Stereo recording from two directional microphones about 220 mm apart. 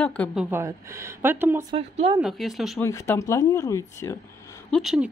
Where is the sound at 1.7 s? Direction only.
25° right (ahead or behind).